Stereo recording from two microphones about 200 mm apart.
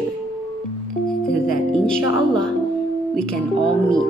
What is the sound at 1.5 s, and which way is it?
Speech, 5° left (ahead or behind).